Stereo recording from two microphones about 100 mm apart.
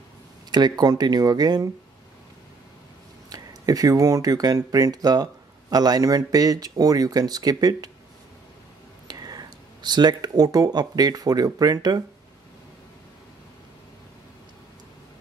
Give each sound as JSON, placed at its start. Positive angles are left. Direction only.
{"t": 0.5, "sound": "speech", "side_deg": -45}
{"t": 3.3, "sound": "speech", "side_deg": -40}
{"t": 9.0, "sound": "speech", "side_deg": -40}